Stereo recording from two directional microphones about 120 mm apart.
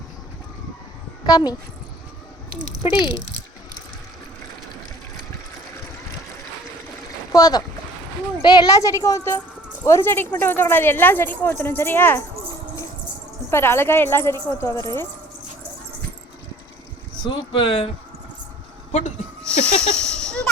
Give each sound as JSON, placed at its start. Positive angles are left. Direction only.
{"t": 1.3, "sound": "speech", "side_deg": 35}
{"t": 7.3, "sound": "speech", "side_deg": 35}
{"t": 13.5, "sound": "speech", "side_deg": 20}
{"t": 17.2, "sound": "speech", "side_deg": 45}
{"t": 18.9, "sound": "speech", "side_deg": 85}
{"t": 19.5, "sound": "a sound", "side_deg": 10}